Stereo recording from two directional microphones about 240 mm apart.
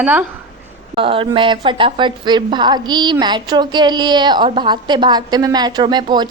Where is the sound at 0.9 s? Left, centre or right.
Right.